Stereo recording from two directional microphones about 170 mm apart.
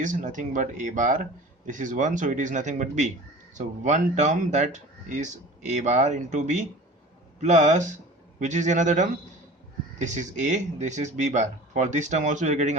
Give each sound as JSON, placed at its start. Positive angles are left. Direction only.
{"t": 0.0, "sound": "speech", "side_deg": -50}